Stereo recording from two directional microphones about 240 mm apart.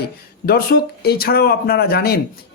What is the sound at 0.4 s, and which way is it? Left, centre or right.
Speech, left.